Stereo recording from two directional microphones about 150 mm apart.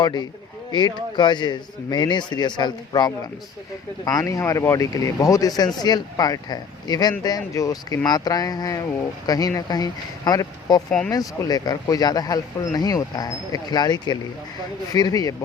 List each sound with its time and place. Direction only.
0.0 s speech: 30° left (ahead or behind)